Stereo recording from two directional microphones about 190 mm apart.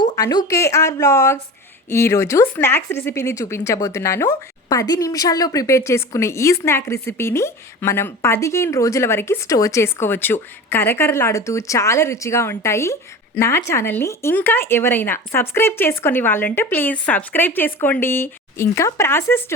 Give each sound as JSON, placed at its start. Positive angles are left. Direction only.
{"t": 0.2, "sound": "speech", "side_deg": 20}